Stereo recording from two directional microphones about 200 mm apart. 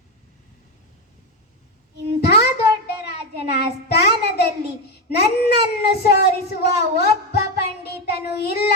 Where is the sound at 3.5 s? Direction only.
55° left (ahead or behind).